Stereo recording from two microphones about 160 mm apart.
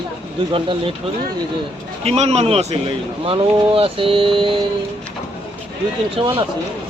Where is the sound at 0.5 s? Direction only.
35° right (ahead or behind).